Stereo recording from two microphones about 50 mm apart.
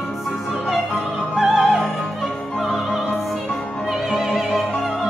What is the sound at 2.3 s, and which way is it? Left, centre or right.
Opera, left.